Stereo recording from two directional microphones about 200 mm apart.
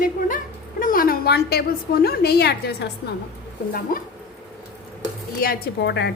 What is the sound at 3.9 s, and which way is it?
Speech, 45° left (ahead or behind).